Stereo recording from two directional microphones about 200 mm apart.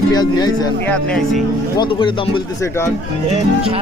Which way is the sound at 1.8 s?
25° left (ahead or behind).